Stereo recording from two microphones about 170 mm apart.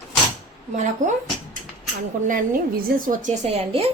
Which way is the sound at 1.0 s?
45° right (ahead or behind).